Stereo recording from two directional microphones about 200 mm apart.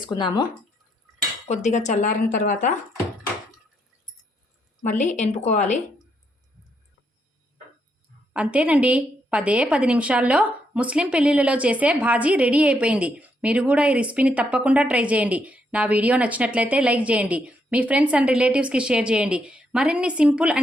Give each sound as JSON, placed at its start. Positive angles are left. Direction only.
{"t": 0.1, "sound": "speech", "side_deg": 20}
{"t": 1.5, "sound": "a woman's voice", "side_deg": 35}
{"t": 4.8, "sound": "a woman's voice", "side_deg": 40}
{"t": 8.3, "sound": "a woman's voice", "side_deg": -5}